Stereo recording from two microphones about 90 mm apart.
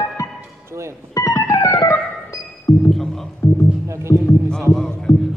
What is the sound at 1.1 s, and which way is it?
Music, 40° left (ahead or behind).